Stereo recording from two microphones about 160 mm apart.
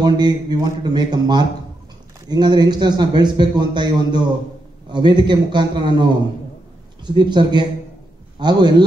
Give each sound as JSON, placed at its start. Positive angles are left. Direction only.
{"t": 0.0, "sound": "a man's voice", "side_deg": -25}
{"t": 7.2, "sound": "a man's voice", "side_deg": -30}